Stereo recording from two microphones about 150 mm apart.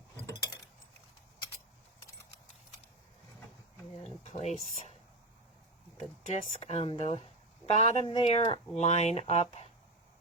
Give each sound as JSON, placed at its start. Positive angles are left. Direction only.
{"t": 4.2, "sound": "speech", "side_deg": 50}
{"t": 6.2, "sound": "speech", "side_deg": 50}